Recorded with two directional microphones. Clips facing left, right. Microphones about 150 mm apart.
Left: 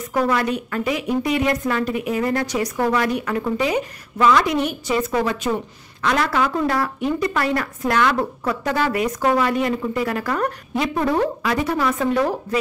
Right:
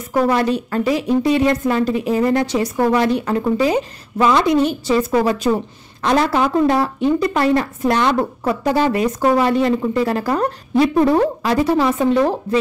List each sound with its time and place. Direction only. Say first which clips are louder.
0.1 s a woman's voice: right 4 dB; 30° right (ahead or behind)